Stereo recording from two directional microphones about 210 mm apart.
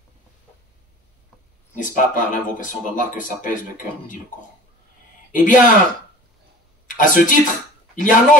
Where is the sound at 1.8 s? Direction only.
40° left (ahead or behind).